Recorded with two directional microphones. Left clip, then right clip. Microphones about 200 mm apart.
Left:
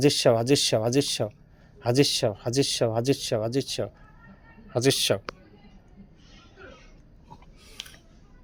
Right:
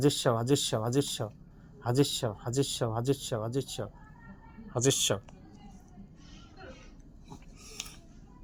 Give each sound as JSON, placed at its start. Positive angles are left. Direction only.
{"t": 0.0, "sound": "speech", "side_deg": 55}